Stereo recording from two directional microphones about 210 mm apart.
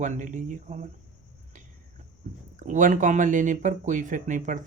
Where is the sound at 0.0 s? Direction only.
35° right (ahead or behind).